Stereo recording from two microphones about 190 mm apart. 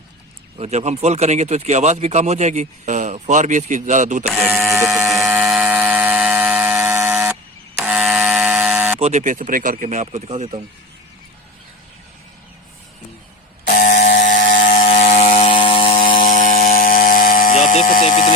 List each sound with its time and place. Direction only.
0.6 s speech: 35° right (ahead or behind)
5.0 s a sound: 5° right (ahead or behind)
9.0 s speech: 35° right (ahead or behind)
13.7 s buzzer: 45° left (ahead or behind)
14.3 s mechanisms: 45° left (ahead or behind)
14.8 s ratchet: 35° left (ahead or behind)
16.1 s a sound: 45° left (ahead or behind)